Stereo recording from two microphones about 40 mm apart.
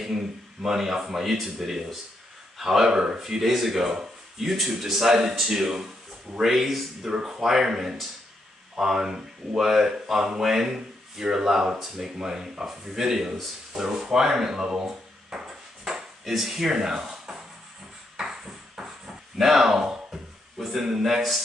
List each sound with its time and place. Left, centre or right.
0.0 s speech: centre
7.1 s speech: centre
13.7 s a sound: centre
16.7 s speech: centre
18.1 s a sound: centre
20.5 s speech: centre